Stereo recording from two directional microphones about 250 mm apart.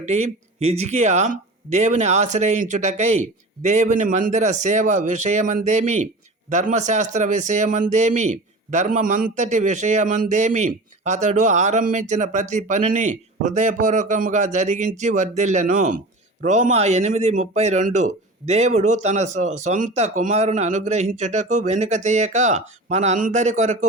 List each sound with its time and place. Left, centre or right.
0.0 s speech: right